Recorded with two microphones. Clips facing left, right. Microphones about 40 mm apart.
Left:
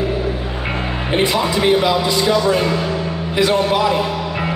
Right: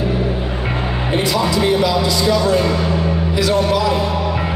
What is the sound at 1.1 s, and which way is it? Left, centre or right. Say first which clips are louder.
A man's voice: left 1 dB; left.